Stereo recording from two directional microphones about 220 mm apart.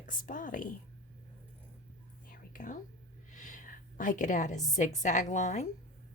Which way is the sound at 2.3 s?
35° left (ahead or behind).